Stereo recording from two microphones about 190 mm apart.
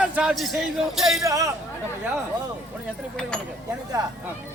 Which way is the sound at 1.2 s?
15° right (ahead or behind).